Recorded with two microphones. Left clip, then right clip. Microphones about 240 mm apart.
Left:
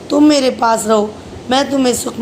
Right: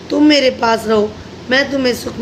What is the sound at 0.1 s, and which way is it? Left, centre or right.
A woman's voice, centre.